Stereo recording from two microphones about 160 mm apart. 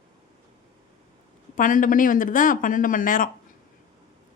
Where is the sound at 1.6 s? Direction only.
55° left (ahead or behind).